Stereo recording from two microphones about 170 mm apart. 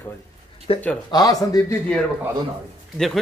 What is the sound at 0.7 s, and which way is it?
Speech, 35° left (ahead or behind).